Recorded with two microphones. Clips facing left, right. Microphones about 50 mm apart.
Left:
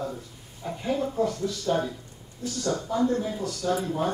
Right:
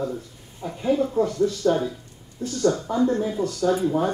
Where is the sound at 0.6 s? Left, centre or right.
Centre.